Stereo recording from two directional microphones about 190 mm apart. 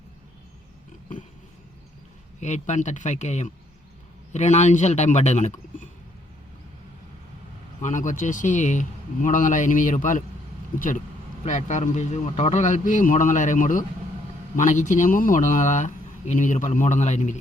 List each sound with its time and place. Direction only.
2.4 s speech: 40° left (ahead or behind)
7.8 s speech: 40° left (ahead or behind)